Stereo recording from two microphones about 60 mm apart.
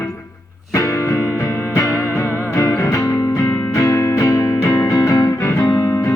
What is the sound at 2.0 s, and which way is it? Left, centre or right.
Music, left.